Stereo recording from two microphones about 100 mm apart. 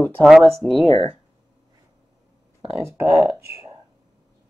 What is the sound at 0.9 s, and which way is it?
Speech, 65° right (ahead or behind).